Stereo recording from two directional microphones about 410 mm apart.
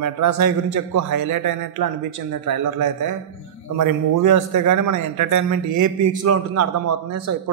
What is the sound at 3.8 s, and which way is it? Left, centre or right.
A man's voice, right.